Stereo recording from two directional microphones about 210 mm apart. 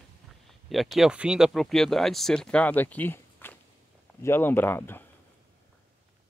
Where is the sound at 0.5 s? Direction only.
Centre (ahead or behind).